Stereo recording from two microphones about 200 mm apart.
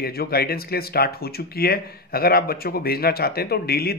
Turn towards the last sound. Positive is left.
turn(degrees=50)  # may be behind; listen again after turning